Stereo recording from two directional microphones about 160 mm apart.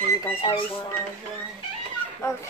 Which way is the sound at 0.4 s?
35° left (ahead or behind).